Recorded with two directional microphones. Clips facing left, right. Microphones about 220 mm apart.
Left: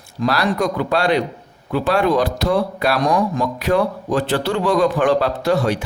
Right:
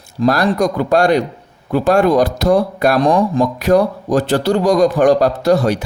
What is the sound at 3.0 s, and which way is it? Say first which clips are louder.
A man's voice: right 5 dB; 30° right (ahead or behind).